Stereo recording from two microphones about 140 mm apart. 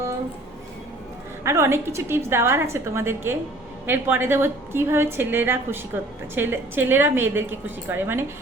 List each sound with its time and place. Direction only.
1.5 s a woman's voice: 20° right (ahead or behind)